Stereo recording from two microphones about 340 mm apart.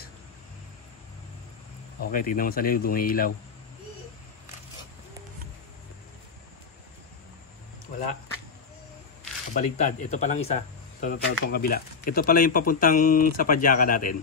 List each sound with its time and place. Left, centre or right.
2.0 s speech: left
9.5 s speech: left